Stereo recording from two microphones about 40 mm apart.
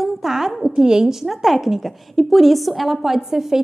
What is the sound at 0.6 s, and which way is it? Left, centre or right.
Speech, centre.